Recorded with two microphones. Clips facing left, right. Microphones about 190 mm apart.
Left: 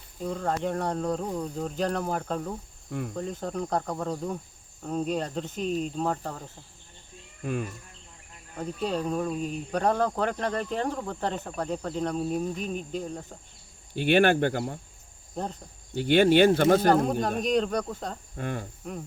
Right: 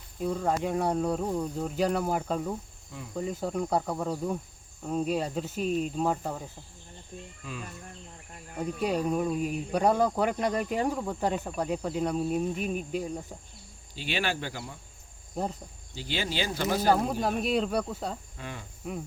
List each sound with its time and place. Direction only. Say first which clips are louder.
0.2 s speech: right 1 dB; 5° right (ahead or behind)
7.4 s speech: left 11 dB; 55° left (ahead or behind)
8.5 s speech: right 1 dB; 10° right (ahead or behind)
13.9 s speech: left 11 dB; 55° left (ahead or behind)
15.4 s speech: right 1 dB; 5° right (ahead or behind)
15.9 s speech: left 14 dB; 60° left (ahead or behind)
16.9 s cricket: left 2 dB; 5° right (ahead or behind)
18.3 s cricket: left 8 dB; 50° left (ahead or behind)